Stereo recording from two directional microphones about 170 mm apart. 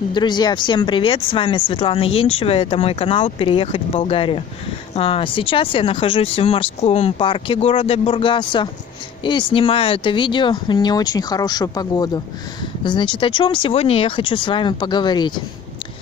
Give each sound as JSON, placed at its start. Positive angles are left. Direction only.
{"t": 0.1, "sound": "speech", "side_deg": 25}